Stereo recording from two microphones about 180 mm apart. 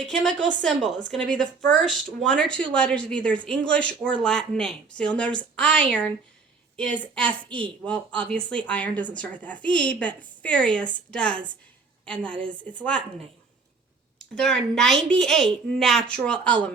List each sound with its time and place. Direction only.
0.0 s speech: 5° left (ahead or behind)
0.3 s a woman's voice: 85° right
1.1 s a woman's voice: 5° left (ahead or behind)
14.3 s speech: 5° left (ahead or behind)